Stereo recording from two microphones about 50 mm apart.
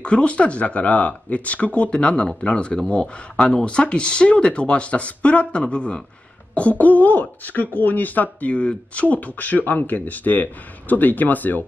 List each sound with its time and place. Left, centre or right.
0.0 s speech: left